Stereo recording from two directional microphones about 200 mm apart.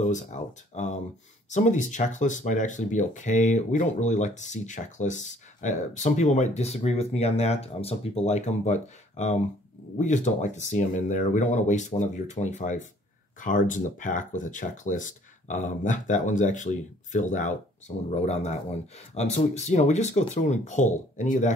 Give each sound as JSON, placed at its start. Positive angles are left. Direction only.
{"t": 0.0, "sound": "speech", "side_deg": 35}